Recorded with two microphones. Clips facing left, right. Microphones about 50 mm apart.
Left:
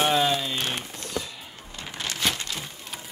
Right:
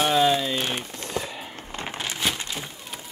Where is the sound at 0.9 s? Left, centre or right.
Right.